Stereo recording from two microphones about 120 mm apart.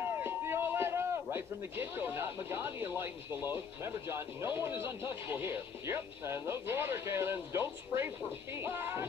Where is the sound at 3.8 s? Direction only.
20° right (ahead or behind).